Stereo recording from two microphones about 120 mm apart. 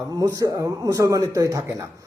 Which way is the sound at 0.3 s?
30° right (ahead or behind).